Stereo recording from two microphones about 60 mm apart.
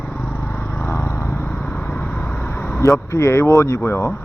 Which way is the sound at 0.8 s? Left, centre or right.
Left.